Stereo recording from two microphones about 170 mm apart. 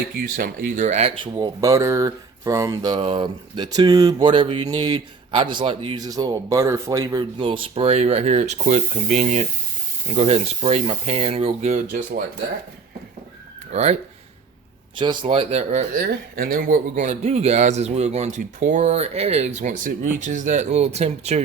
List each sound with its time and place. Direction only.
0.2 s speech: 60° right (ahead or behind)
0.9 s speech: 40° right (ahead or behind)
1.2 s speech: 20° right (ahead or behind); by 11.8 s 40° right (ahead or behind)
11.9 s speech: 55° right (ahead or behind)
14.9 s speech: 30° right (ahead or behind)